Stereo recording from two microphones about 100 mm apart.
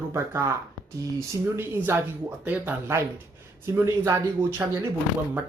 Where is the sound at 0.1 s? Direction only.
30° right (ahead or behind).